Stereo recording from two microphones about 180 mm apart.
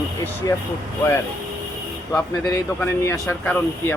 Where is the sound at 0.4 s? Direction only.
20° left (ahead or behind).